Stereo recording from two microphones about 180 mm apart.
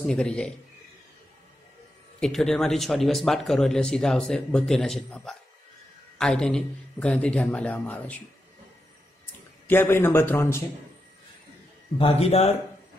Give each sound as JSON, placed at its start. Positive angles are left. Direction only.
{"t": 0.0, "sound": "speech", "side_deg": 5}
{"t": 2.1, "sound": "speech", "side_deg": 5}
{"t": 9.2, "sound": "speech", "side_deg": 10}
{"t": 12.0, "sound": "speech", "side_deg": 35}